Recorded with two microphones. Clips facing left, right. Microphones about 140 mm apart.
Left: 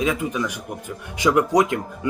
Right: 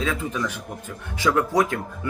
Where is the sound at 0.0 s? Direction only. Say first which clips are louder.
Left 3 dB; 15° left (ahead or behind).